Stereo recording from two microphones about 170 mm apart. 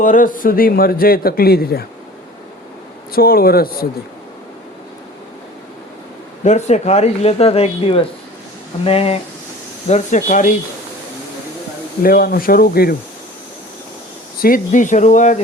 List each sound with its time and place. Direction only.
0.0 s a man's voice: 50° left (ahead or behind)
3.1 s a man's voice: 60° left (ahead or behind)
6.4 s speech: 45° left (ahead or behind)
9.9 s speech: 45° left (ahead or behind)
12.0 s a man's voice: 60° left (ahead or behind)
14.4 s speech: 50° left (ahead or behind)